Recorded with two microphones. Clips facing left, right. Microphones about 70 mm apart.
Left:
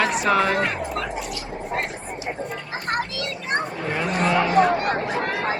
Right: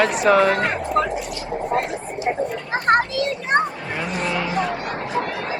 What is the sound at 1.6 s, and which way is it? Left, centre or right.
Vehicle, right.